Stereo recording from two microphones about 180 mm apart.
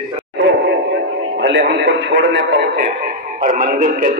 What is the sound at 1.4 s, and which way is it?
A man's voice, 75° right (ahead or behind).